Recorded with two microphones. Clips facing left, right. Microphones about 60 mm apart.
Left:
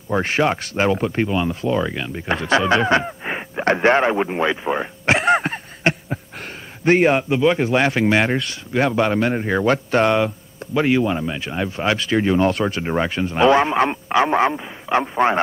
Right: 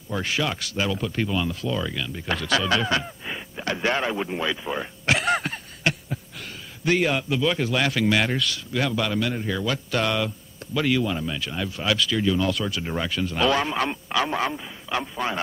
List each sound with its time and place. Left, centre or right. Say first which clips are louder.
0.1 s a man's voice: left 8 dB; left